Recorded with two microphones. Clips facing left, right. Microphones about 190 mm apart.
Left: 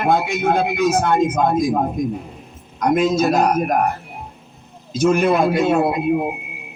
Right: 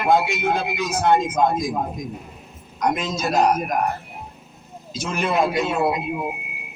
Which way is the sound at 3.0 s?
55° left (ahead or behind).